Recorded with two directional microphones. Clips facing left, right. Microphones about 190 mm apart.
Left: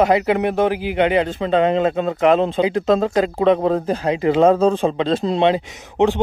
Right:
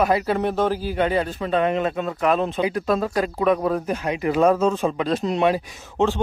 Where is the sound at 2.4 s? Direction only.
25° left (ahead or behind).